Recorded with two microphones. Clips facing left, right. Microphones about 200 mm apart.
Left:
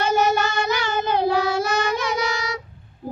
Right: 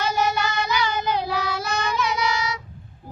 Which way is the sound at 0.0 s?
50° left (ahead or behind).